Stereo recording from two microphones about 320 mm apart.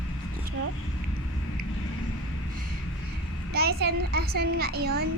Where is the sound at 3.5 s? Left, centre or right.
Right.